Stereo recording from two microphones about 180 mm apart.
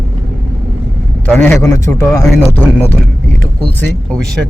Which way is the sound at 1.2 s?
10° left (ahead or behind).